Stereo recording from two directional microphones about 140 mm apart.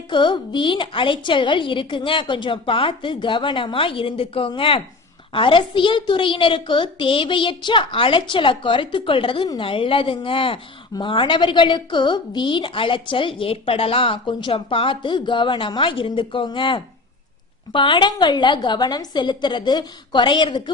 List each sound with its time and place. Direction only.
0.1 s a woman's voice: 35° left (ahead or behind)